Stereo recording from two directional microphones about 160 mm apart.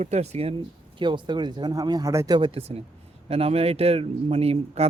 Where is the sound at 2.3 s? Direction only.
35° right (ahead or behind).